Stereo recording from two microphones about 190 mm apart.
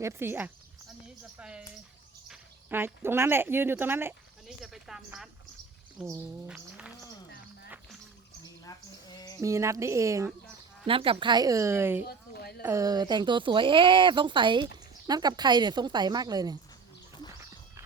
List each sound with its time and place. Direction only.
0.0 s speech: 15° right (ahead or behind)
8.6 s a sound: 20° left (ahead or behind)
9.4 s speech: 15° right (ahead or behind)
10.8 s speech: 30° right (ahead or behind); by 12.0 s 10° right (ahead or behind)
12.0 s a sound: 55° left (ahead or behind)
12.6 s speech: 20° right (ahead or behind)